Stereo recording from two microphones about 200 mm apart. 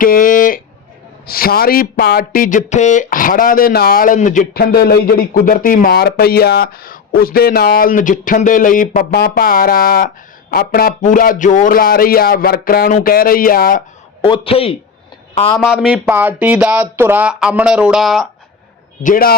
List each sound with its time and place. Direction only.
0.0 s a sound: 45° left (ahead or behind)
1.3 s speech: 50° left (ahead or behind)
4.5 s speech: 55° left (ahead or behind)
14.2 s speech: 25° left (ahead or behind)
15.5 s speech: centre (ahead or behind)
19.0 s speech: 45° left (ahead or behind)